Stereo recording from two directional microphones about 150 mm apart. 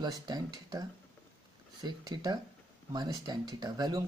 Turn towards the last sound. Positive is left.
turn(degrees=-25)  # may be behind; listen again after turning